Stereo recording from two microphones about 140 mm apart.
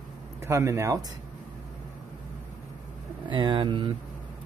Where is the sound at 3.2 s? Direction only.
35° right (ahead or behind).